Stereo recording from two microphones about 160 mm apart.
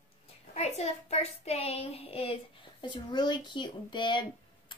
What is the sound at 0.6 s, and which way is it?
A child's voice, 40° left (ahead or behind).